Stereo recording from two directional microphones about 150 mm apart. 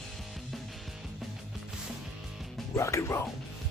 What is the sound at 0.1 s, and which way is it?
Music, centre (ahead or behind).